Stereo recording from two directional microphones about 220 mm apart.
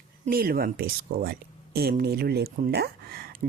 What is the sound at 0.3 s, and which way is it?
Speech, 40° right (ahead or behind).